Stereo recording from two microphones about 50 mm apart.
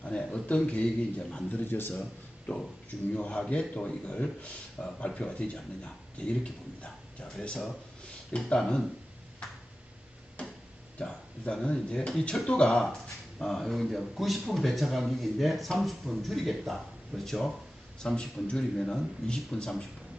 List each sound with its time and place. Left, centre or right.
0.0 s a man's voice: left
1.5 s speech: left
2.5 s a man's voice: left; by 8.8 s centre
10.4 s tick-tock: left
10.9 s a sound: left
11.6 s a man's voice: left